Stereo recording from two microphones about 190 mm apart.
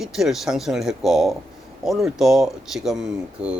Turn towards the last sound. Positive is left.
turn(degrees=-5)  # may be behind; listen again after turning